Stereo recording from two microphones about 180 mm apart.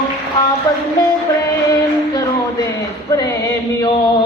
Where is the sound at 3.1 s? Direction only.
20° left (ahead or behind).